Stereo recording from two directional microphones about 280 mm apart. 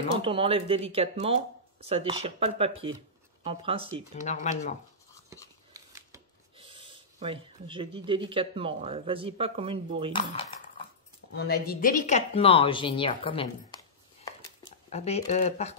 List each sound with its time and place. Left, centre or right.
0.2 s speech: centre
4.1 s a woman's voice: left
5.7 s speech: centre
11.3 s a woman's voice: left; by 13.7 s centre
14.9 s a woman's voice: left